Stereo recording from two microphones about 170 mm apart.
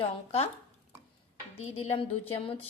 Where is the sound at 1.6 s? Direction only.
40° left (ahead or behind).